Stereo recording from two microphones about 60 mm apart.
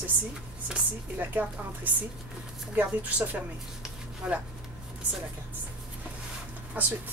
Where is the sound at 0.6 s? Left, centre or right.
Right.